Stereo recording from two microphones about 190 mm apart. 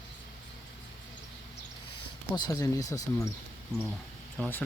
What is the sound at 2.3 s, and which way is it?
Speech, 20° left (ahead or behind).